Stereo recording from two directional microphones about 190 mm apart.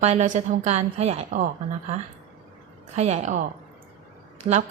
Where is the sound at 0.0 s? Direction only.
35° right (ahead or behind).